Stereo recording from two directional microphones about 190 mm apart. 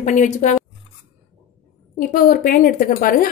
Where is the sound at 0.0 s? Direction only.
40° left (ahead or behind).